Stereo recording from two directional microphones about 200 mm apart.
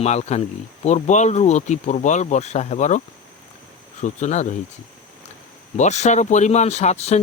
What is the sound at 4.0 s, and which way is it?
Speech, 35° left (ahead or behind).